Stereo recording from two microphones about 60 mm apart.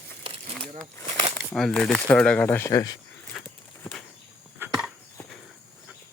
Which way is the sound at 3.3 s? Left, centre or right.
Centre.